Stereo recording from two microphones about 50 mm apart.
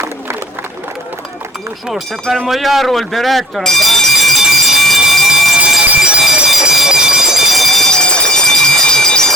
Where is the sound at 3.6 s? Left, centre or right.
Centre.